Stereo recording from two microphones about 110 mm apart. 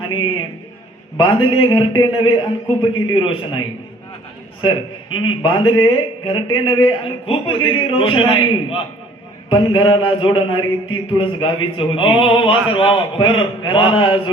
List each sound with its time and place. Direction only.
0.0 s a man's voice: 50° left (ahead or behind)